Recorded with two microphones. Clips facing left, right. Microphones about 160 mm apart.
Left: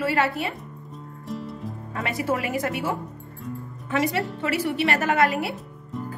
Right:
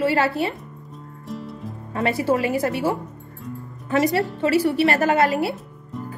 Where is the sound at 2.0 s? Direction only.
30° right (ahead or behind).